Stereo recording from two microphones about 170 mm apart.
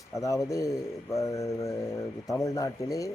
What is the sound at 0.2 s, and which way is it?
Speech, 20° left (ahead or behind).